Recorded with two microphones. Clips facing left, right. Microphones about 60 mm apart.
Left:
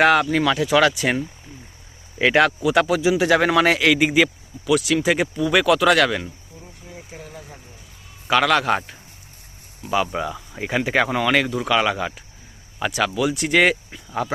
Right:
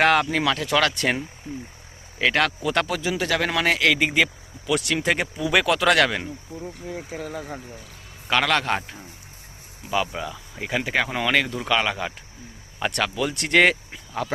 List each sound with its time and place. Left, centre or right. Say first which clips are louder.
0.0 s speech: left 3 dB; centre
6.5 s speech: right 9 dB; right
6.8 s speech: right 5 dB; right
8.3 s speech: left 4 dB; centre
10.1 s speech: left 5 dB; centre
10.9 s speech: left 3 dB; centre